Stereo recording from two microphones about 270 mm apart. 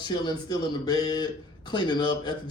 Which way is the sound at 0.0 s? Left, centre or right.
Centre.